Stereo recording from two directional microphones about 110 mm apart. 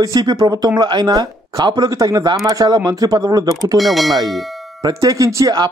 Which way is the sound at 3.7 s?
Centre (ahead or behind).